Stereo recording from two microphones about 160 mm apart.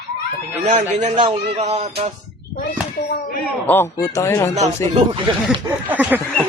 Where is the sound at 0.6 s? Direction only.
50° right (ahead or behind).